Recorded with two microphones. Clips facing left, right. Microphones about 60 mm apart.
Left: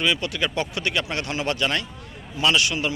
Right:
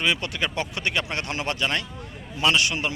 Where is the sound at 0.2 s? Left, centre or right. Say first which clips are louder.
Left 2 dB; right.